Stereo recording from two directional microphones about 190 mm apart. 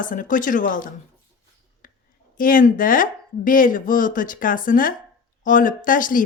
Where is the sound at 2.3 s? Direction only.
45° left (ahead or behind).